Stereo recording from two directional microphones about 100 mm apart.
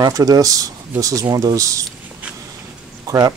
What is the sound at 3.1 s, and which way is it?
Speech, 40° right (ahead or behind).